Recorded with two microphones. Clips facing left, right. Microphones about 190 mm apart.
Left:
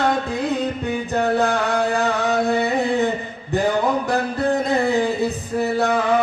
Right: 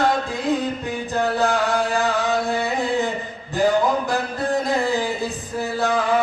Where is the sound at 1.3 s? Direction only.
60° left (ahead or behind).